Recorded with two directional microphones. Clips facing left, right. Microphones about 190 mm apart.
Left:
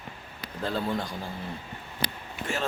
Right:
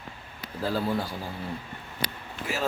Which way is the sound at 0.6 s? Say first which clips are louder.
Right 2 dB; 5° right (ahead or behind).